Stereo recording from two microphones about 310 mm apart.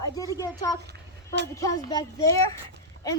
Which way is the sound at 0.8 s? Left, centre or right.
Right.